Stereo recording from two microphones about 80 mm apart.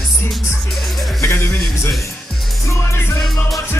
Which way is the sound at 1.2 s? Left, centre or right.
Left.